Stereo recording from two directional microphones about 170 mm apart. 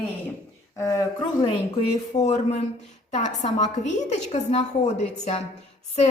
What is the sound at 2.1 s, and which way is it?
A woman's voice, 40° left (ahead or behind).